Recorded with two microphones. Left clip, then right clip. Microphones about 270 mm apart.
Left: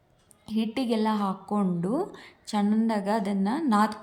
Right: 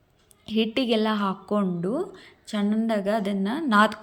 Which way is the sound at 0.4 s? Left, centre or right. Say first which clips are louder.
Right 5 dB; centre.